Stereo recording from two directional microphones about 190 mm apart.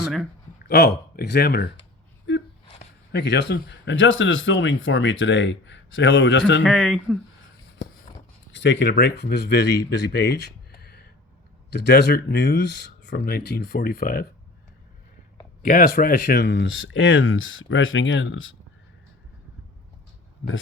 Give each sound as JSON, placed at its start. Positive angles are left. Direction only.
{"t": 0.7, "sound": "speech", "side_deg": 60}
{"t": 3.1, "sound": "speech", "side_deg": 65}
{"t": 6.6, "sound": "speech", "side_deg": 5}
{"t": 8.5, "sound": "speech", "side_deg": 70}
{"t": 15.6, "sound": "speech", "side_deg": 45}